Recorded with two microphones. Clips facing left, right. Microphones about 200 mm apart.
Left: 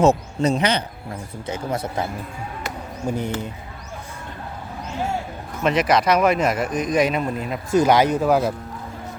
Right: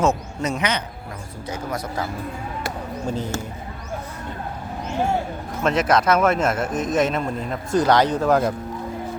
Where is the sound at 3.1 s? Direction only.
15° left (ahead or behind).